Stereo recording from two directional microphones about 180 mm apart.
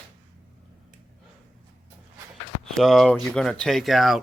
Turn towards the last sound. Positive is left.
turn(degrees=0)  # may be behind; listen again after turning